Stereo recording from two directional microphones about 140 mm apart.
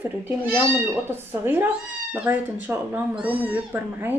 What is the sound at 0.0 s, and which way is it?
Speech, 15° right (ahead or behind).